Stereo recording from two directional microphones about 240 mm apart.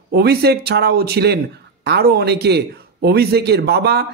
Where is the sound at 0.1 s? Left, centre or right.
Right.